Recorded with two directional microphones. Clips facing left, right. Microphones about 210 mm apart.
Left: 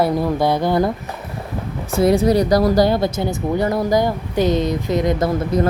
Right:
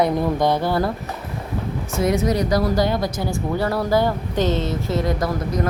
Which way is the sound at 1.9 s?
35° left (ahead or behind).